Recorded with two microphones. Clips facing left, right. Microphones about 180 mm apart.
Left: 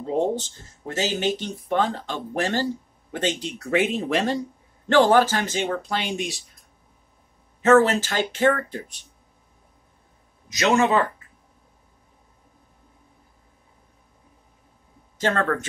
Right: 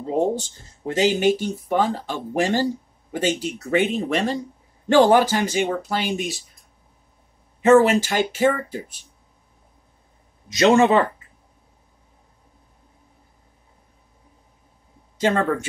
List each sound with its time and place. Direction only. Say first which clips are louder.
0.0 s speech: right 2 dB; 10° right (ahead or behind)
4.8 s speech: right 2 dB; 15° right (ahead or behind)
7.6 s speech: right 2 dB; 10° right (ahead or behind)
10.5 s speech: right 5 dB; 30° right (ahead or behind)
15.1 s speech: right 3 dB; 15° right (ahead or behind)